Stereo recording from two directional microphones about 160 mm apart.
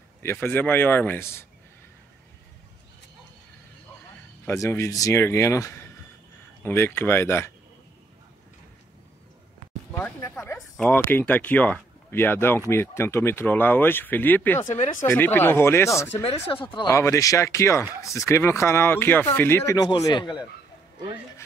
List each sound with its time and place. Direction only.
0.2 s speech: 15° left (ahead or behind)
4.5 s speech: 15° left (ahead or behind)
9.9 s speech: 10° left (ahead or behind)
14.7 s speech: 50° left (ahead or behind)
15.0 s speech: 15° left (ahead or behind)
16.1 s speech: 35° left (ahead or behind)
16.9 s speech: 20° left (ahead or behind)